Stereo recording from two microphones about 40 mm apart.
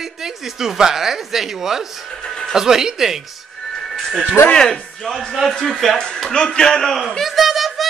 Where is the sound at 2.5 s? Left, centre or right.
Centre.